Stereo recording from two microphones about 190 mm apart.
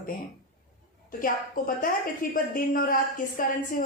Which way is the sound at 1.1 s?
50° left (ahead or behind).